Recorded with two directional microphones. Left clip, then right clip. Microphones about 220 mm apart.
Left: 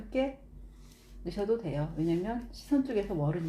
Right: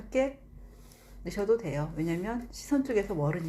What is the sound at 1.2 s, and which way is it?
Speech, 25° right (ahead or behind).